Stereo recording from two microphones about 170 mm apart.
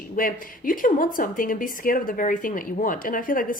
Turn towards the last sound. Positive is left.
turn(degrees=55)  # may be behind; listen again after turning